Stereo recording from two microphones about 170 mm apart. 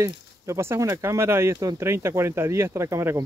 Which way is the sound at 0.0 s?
15° right (ahead or behind).